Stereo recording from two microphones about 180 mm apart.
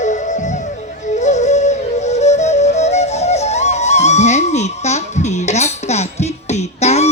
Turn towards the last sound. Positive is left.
turn(degrees=35)  # may be behind; listen again after turning